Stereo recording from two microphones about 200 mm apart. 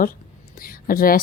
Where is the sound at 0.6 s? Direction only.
45° left (ahead or behind).